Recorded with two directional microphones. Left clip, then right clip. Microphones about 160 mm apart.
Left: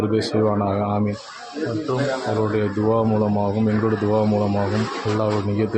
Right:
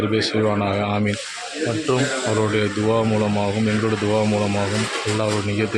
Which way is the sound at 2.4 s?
5° right (ahead or behind).